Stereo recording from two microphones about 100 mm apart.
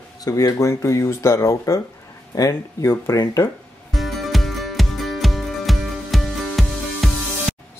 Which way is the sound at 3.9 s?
Centre (ahead or behind).